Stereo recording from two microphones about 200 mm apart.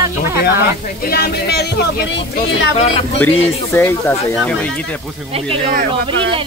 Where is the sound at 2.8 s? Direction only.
30° left (ahead or behind).